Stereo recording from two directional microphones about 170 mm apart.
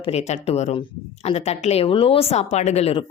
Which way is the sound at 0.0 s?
40° left (ahead or behind).